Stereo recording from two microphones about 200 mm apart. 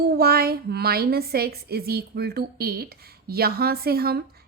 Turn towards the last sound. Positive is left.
turn(degrees=-50)  # may be behind; listen again after turning